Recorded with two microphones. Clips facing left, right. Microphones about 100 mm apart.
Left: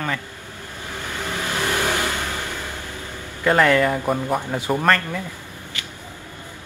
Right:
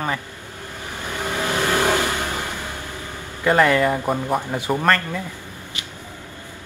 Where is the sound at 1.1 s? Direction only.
20° right (ahead or behind).